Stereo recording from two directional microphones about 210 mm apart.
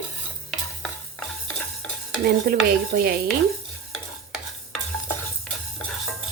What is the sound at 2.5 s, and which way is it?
Speech, 45° right (ahead or behind).